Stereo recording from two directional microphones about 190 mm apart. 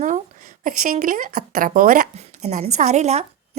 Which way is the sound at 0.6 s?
45° right (ahead or behind).